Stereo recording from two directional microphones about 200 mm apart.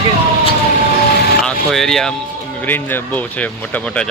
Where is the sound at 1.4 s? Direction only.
Centre (ahead or behind).